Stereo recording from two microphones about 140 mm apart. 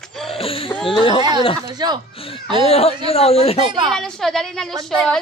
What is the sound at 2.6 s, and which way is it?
Speech, 45° left (ahead or behind).